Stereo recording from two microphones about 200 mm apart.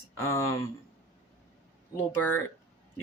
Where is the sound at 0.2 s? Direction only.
15° left (ahead or behind).